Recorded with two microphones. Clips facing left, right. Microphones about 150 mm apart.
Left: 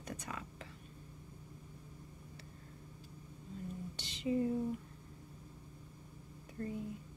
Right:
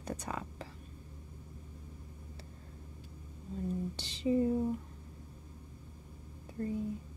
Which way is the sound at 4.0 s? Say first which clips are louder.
Right 4 dB; 30° right (ahead or behind).